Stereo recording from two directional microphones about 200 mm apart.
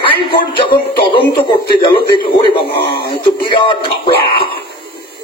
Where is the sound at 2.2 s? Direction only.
25° left (ahead or behind).